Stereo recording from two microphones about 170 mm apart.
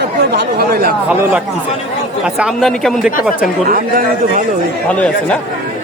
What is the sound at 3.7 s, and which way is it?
Speech, 60° right (ahead or behind).